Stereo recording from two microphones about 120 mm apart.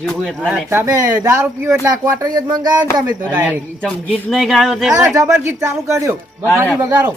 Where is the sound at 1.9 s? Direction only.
35° right (ahead or behind).